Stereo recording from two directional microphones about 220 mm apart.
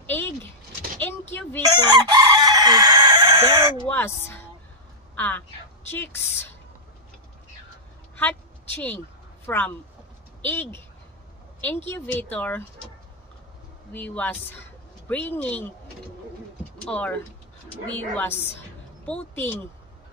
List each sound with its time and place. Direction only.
0.0 s a sound: 10° left (ahead or behind)
1.3 s speech: 10° left (ahead or behind)
1.8 s chicken: 20° right (ahead or behind)
3.9 s a woman's voice: 10° left (ahead or behind)
8.2 s a sound: 10° left (ahead or behind)
9.5 s speech: 10° left (ahead or behind)
13.9 s speech: 5° left (ahead or behind)
16.8 s speech: 5° left (ahead or behind)